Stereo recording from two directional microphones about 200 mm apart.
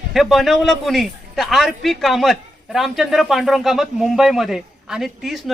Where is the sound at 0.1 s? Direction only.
Centre (ahead or behind).